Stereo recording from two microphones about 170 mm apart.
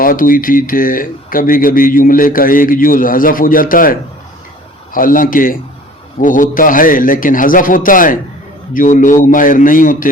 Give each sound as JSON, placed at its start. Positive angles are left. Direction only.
{"t": 0.0, "sound": "speech", "side_deg": 55}
{"t": 4.9, "sound": "a man's voice", "side_deg": 55}